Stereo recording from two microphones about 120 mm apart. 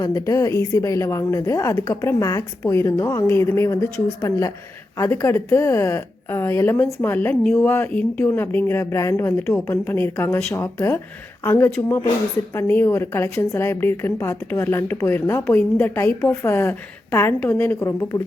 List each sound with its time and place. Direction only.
0.0 s a woman's voice: 30° left (ahead or behind)